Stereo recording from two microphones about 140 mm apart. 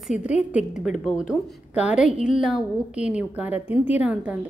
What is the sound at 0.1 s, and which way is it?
Speech, 60° left (ahead or behind).